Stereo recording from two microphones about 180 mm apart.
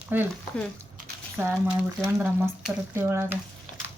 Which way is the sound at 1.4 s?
15° right (ahead or behind).